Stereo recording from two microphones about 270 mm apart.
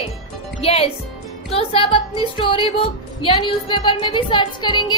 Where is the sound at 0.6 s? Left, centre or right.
Left.